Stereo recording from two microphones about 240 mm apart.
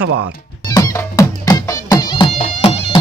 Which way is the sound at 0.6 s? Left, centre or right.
Centre.